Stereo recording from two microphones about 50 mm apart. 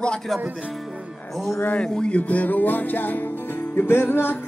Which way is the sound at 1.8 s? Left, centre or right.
Left.